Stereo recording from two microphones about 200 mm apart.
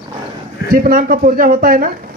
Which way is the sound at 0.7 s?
45° right (ahead or behind).